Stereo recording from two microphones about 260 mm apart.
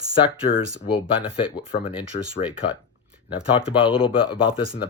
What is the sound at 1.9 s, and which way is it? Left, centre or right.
Speech, centre.